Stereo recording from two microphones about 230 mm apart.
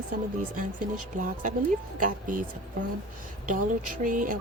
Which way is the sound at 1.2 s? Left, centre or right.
Right.